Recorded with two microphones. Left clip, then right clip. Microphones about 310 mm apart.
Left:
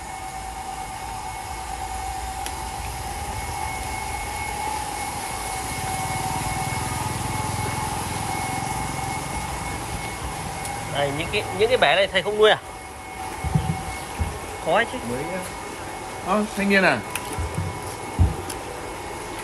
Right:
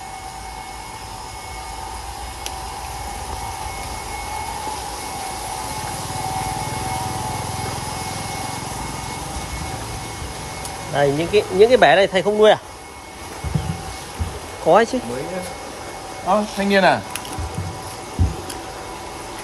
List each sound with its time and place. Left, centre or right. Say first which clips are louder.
11.0 s speech: right 8 dB; right
14.7 s speech: right 7 dB; right
16.3 s speech: right 4 dB; right